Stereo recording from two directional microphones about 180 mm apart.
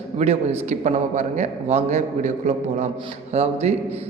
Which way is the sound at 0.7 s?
40° right (ahead or behind).